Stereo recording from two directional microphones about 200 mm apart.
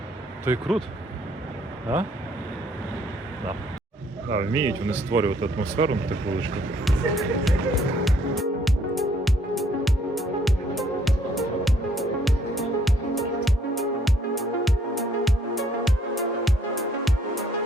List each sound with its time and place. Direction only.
0.5 s speech: 10° right (ahead or behind)
4.3 s speech: 25° right (ahead or behind)
6.8 s music: centre (ahead or behind)